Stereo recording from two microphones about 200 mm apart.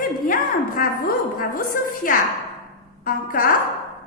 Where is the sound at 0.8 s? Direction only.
45° left (ahead or behind).